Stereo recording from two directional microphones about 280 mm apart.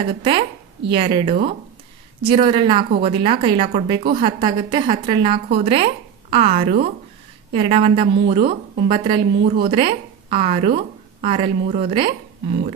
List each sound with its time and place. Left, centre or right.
0.0 s a woman's voice: centre